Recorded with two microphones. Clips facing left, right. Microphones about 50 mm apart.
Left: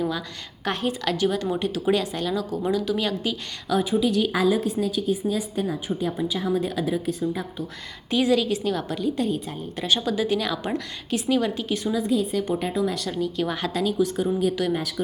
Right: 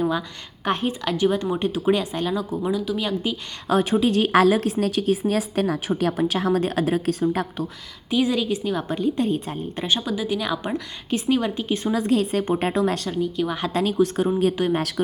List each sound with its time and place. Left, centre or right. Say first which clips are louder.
0.0 s a woman's voice: right 3 dB; right
2.6 s a woman's voice: left 1 dB; centre
3.7 s speech: right 3 dB; right
4.3 s a woman's voice: right 5 dB; right
8.2 s a woman's voice: left 1 dB; centre
10.0 s a woman's voice: left 1 dB; centre; by 11.9 s right
11.9 s a woman's voice: right 3 dB; right
13.1 s a woman's voice: right 2 dB; centre
13.7 s speech: right 3 dB; right